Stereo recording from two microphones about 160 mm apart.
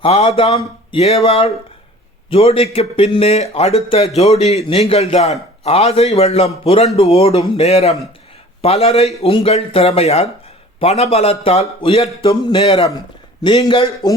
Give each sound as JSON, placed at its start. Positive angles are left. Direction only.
{"t": 0.0, "sound": "speech", "side_deg": 40}
{"t": 13.4, "sound": "a man's voice", "side_deg": 25}